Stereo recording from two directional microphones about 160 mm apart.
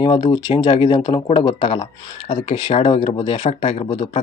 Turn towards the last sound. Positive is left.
turn(degrees=35)  # may be behind; listen again after turning